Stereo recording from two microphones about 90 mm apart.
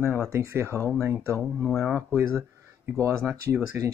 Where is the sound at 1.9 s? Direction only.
30° right (ahead or behind).